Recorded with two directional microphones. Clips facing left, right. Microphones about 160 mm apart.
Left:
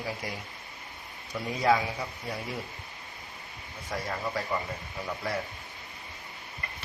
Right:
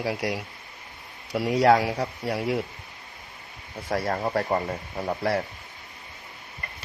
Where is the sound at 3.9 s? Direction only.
55° right (ahead or behind).